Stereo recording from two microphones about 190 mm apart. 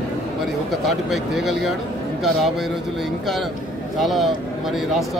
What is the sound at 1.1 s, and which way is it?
Speech, centre (ahead or behind).